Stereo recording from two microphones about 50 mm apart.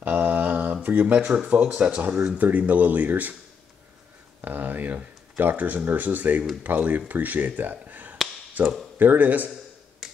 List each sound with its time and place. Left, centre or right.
0.0 s mantra: right
0.8 s speech: right
4.5 s speech: right
10.0 s finger snapping: centre